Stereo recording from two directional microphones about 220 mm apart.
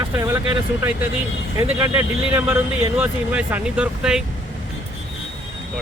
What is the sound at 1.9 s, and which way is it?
Speech, 10° right (ahead or behind).